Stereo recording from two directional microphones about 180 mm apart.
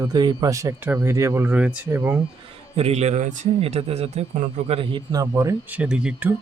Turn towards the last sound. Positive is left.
turn(degrees=-5)  # may be behind; listen again after turning